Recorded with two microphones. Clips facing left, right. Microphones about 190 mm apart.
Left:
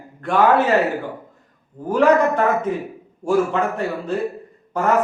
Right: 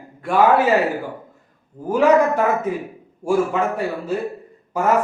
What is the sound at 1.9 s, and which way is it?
Speech, 10° right (ahead or behind).